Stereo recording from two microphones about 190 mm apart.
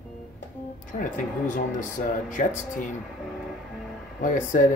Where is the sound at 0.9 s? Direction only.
45° left (ahead or behind).